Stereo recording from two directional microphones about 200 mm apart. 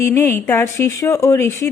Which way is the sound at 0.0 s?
10° left (ahead or behind).